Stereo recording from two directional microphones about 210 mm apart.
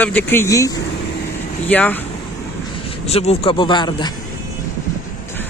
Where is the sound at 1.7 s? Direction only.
10° left (ahead or behind).